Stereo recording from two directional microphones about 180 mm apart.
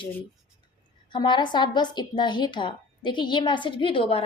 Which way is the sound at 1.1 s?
25° left (ahead or behind).